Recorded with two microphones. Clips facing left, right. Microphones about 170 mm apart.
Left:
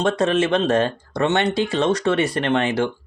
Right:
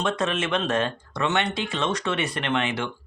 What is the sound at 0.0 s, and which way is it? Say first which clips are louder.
Speech: left 7 dB; 35° left (ahead or behind).